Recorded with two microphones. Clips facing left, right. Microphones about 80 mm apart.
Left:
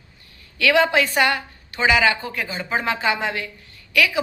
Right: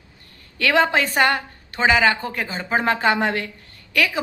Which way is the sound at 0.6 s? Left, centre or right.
Right.